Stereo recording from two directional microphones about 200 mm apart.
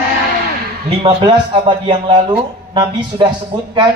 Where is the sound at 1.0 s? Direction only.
25° right (ahead or behind).